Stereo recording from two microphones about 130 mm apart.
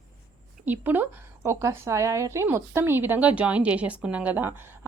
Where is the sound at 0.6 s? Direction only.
15° right (ahead or behind).